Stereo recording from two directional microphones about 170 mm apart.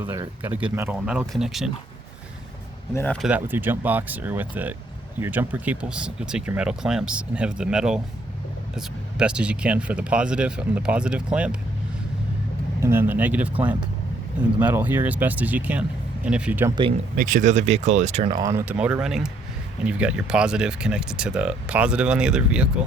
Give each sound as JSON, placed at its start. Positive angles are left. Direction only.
{"t": 0.0, "sound": "speech", "side_deg": -15}
{"t": 2.9, "sound": "speech", "side_deg": 10}
{"t": 3.2, "sound": "speech", "side_deg": -10}
{"t": 12.8, "sound": "speech", "side_deg": -15}
{"t": 17.2, "sound": "speech", "side_deg": -50}
{"t": 18.3, "sound": "speech", "side_deg": -20}